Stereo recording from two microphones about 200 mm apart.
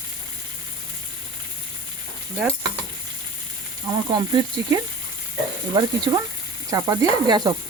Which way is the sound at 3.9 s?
25° right (ahead or behind).